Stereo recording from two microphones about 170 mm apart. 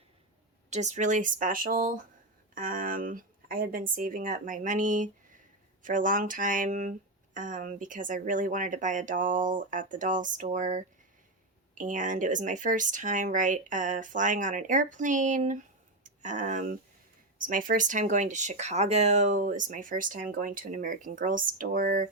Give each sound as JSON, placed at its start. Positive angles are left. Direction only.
{"t": 0.7, "sound": "speech", "side_deg": -45}